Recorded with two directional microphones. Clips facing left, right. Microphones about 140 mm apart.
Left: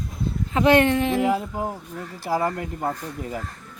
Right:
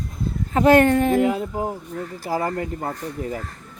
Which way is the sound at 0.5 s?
40° right (ahead or behind).